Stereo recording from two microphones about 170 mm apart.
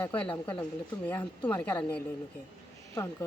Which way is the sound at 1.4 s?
10° left (ahead or behind).